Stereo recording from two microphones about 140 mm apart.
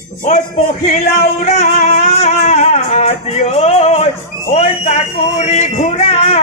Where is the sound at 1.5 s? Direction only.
55° left (ahead or behind).